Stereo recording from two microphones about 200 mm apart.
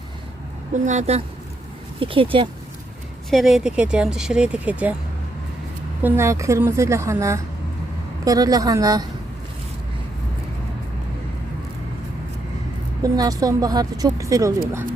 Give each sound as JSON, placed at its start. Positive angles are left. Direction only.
{"t": 0.7, "sound": "a woman's voice", "side_deg": -35}
{"t": 3.2, "sound": "speech", "side_deg": 0}
{"t": 6.0, "sound": "speech", "side_deg": -10}
{"t": 13.0, "sound": "speech", "side_deg": -20}